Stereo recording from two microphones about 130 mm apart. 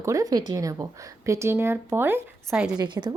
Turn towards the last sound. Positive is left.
turn(degrees=-35)  # may be behind; listen again after turning